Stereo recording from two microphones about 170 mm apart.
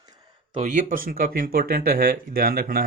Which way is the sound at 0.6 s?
50° right (ahead or behind).